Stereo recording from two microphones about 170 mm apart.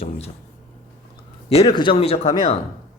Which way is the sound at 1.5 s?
30° left (ahead or behind).